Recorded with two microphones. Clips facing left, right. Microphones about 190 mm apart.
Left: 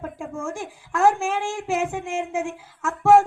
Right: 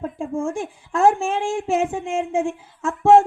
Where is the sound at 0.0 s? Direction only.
30° right (ahead or behind).